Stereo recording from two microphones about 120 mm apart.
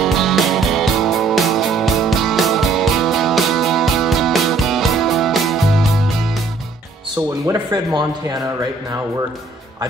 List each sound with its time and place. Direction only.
0.0 s music: centre (ahead or behind)
7.7 s speech: 35° right (ahead or behind)